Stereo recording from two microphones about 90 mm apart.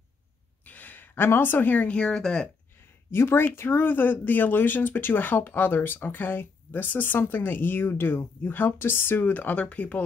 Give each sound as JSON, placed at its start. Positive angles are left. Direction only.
{"t": 0.7, "sound": "speech", "side_deg": 20}
{"t": 3.1, "sound": "speech", "side_deg": 25}